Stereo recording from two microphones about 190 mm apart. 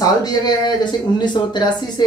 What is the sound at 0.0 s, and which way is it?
Speech, 20° left (ahead or behind).